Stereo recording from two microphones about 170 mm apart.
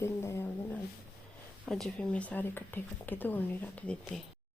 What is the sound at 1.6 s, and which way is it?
Speech, 5° left (ahead or behind).